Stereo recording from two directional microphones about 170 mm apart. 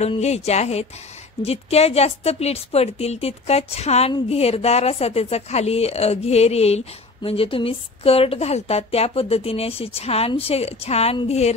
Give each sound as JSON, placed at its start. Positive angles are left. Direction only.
{"t": 0.0, "sound": "speech", "side_deg": 40}